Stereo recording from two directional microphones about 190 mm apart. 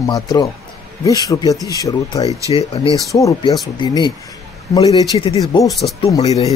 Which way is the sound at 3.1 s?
20° left (ahead or behind).